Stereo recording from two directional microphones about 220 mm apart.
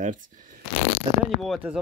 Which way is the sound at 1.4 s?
5° right (ahead or behind).